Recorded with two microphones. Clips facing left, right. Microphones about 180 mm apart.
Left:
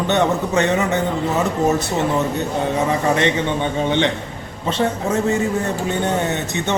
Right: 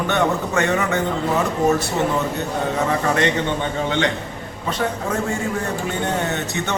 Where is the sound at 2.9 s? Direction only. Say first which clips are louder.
Left 1 dB; 20° left (ahead or behind).